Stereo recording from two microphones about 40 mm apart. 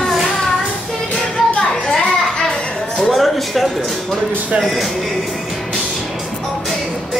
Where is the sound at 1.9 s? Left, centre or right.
Centre.